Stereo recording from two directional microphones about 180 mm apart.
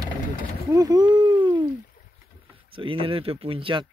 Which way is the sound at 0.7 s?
20° right (ahead or behind).